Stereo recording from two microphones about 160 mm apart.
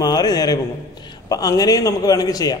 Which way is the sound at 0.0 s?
25° left (ahead or behind).